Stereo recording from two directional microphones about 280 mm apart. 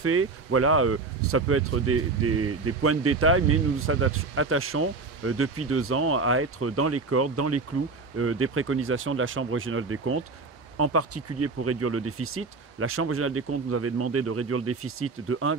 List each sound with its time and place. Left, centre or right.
0.0 s speech: right